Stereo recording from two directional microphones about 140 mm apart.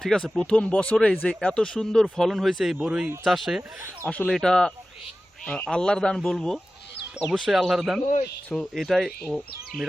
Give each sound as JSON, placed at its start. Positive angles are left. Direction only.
{"t": 0.0, "sound": "speech", "side_deg": 5}
{"t": 4.0, "sound": "speech", "side_deg": 10}
{"t": 8.0, "sound": "speech", "side_deg": 60}
{"t": 8.4, "sound": "speech", "side_deg": 5}